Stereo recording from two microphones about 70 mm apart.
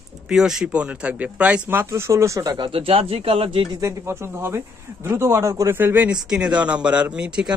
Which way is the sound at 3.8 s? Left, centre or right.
Right.